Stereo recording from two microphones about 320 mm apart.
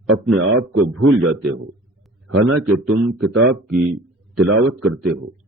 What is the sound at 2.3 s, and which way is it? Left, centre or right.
A man's voice, right.